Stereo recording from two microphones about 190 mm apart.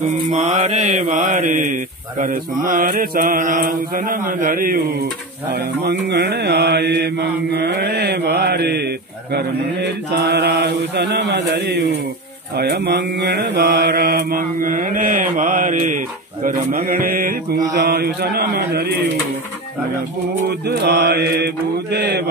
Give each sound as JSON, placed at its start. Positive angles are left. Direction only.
{"t": 0.0, "sound": "mantra", "side_deg": -40}
{"t": 5.5, "sound": "mantra", "side_deg": -60}
{"t": 20.4, "sound": "mantra", "side_deg": -60}